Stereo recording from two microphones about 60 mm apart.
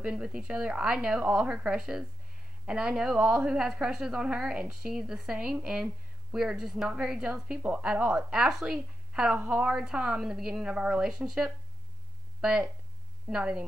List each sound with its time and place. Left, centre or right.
0.0 s a woman's voice: centre
8.3 s a woman's voice: centre